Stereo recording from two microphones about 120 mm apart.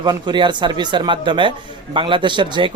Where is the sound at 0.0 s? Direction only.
35° right (ahead or behind).